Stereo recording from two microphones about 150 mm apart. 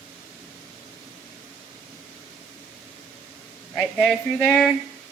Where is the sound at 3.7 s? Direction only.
5° left (ahead or behind).